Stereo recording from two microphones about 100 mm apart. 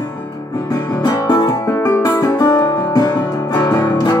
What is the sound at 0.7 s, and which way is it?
Music, 40° left (ahead or behind).